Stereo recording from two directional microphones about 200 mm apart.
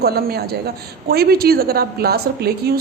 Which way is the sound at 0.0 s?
50° right (ahead or behind).